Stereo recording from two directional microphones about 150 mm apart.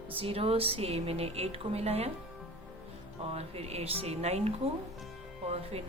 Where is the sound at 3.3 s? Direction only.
45° right (ahead or behind).